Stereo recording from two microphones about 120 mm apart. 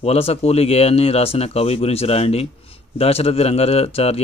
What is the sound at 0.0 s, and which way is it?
Speech, 55° left (ahead or behind).